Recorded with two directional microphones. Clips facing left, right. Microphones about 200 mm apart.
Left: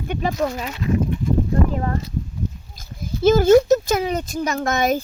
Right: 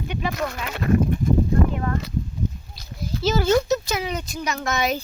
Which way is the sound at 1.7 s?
35° left (ahead or behind).